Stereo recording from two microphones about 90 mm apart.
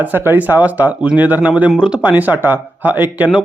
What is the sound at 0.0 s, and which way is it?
Speech, 20° right (ahead or behind).